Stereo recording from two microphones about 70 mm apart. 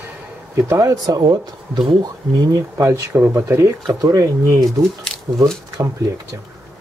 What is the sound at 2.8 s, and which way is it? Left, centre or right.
Speech, right.